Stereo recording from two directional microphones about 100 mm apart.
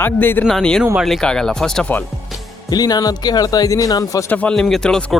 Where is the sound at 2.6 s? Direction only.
40° left (ahead or behind).